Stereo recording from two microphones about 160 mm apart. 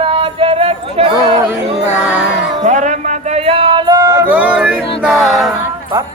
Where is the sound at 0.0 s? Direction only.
35° right (ahead or behind).